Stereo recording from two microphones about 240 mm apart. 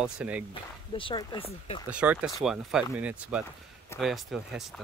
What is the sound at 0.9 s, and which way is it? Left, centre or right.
Speech, left.